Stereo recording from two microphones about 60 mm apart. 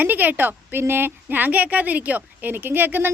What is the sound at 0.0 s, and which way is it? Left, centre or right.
A woman's voice, right.